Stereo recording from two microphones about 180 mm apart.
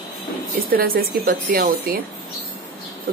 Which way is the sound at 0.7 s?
55° right (ahead or behind).